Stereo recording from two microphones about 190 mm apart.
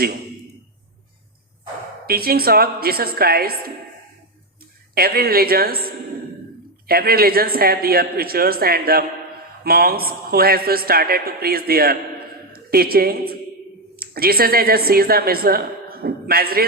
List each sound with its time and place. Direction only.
2.0 s a man's voice: 50° right (ahead or behind)
4.9 s a man's voice: 55° right (ahead or behind)